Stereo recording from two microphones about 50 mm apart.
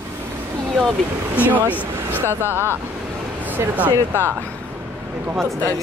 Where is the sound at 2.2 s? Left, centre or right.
Right.